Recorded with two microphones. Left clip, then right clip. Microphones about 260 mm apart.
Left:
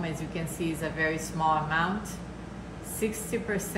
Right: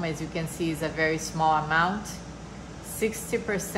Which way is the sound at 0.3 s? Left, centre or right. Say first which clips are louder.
Right 3 dB; right.